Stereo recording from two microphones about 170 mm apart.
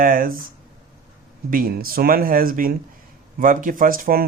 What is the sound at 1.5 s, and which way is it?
Speech, 55° right (ahead or behind).